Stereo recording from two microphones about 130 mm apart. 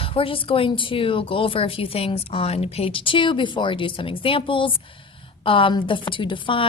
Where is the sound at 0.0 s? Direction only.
45° left (ahead or behind).